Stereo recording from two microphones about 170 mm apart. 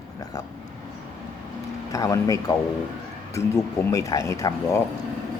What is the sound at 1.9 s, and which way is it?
Speech, 20° left (ahead or behind).